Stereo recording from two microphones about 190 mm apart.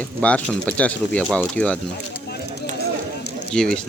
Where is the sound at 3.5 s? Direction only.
5° left (ahead or behind).